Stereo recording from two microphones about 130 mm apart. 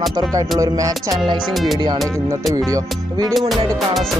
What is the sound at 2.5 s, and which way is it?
Music, 25° right (ahead or behind).